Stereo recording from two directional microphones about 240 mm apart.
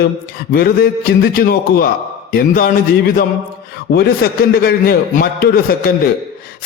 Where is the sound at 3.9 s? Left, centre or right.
Left.